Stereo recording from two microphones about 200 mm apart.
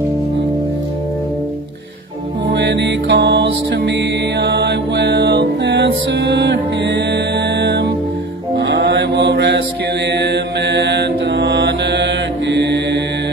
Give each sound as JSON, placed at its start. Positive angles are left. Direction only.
{"t": 2.4, "sound": "music", "side_deg": -60}
{"t": 8.5, "sound": "mantra", "side_deg": -60}